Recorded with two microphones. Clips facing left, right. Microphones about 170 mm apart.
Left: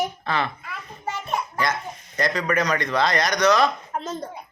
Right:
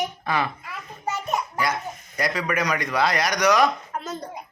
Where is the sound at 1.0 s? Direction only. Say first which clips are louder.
Right 1 dB; 45° right (ahead or behind).